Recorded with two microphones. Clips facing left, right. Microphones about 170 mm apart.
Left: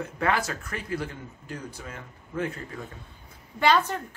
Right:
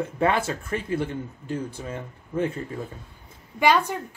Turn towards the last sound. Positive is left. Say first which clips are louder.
# right 2 dB
turn(degrees=-10)  # may be behind; listen again after turning